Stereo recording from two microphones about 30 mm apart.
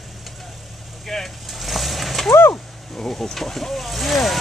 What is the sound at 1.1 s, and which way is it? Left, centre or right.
Speech, centre.